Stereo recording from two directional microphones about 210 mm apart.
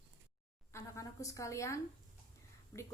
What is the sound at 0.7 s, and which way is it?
A woman's voice, 15° left (ahead or behind).